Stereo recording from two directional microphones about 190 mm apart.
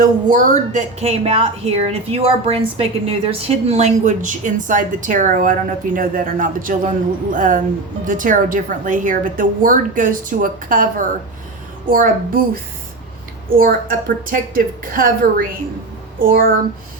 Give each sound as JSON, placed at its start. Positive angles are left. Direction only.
{"t": 0.0, "sound": "a woman's voice", "side_deg": -40}
{"t": 13.5, "sound": "a woman's voice", "side_deg": -50}